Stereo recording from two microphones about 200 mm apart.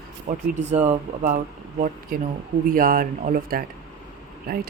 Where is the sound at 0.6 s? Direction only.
35° right (ahead or behind).